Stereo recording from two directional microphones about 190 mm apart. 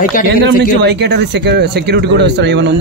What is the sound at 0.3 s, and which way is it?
Speech, 65° right (ahead or behind).